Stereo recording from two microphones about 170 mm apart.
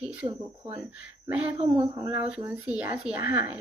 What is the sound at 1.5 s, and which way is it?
Speech, 30° right (ahead or behind).